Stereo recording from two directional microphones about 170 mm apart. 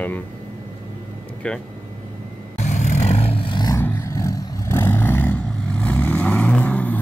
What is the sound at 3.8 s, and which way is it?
Vehicle, 15° left (ahead or behind).